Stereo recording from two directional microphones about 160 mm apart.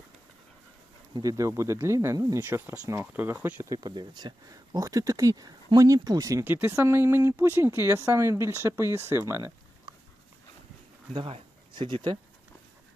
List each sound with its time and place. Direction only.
1.1 s speech: 20° right (ahead or behind)
3.8 s speech: 25° right (ahead or behind)
11.1 s speech: 30° right (ahead or behind)